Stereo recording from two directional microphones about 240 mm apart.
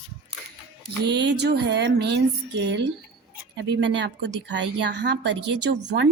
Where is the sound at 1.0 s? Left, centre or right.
Right.